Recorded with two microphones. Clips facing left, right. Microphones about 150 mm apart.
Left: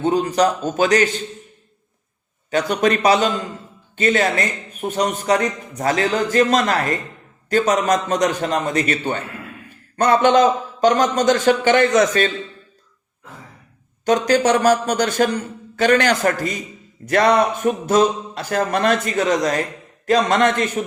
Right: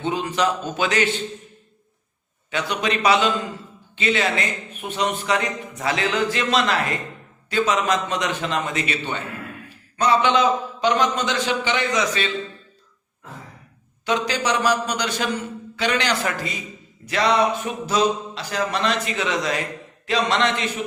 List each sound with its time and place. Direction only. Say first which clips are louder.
0.0 s speech: left 6 dB; 45° left (ahead or behind)
2.5 s a man's voice: left 6 dB; 45° left (ahead or behind)
14.0 s a man's voice: left 7 dB; 45° left (ahead or behind)